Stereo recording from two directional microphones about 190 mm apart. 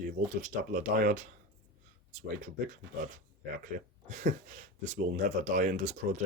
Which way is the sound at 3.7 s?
50° right (ahead or behind).